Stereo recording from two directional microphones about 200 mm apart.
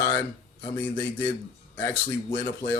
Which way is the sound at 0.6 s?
10° left (ahead or behind).